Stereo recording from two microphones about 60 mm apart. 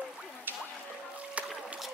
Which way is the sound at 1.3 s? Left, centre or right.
Right.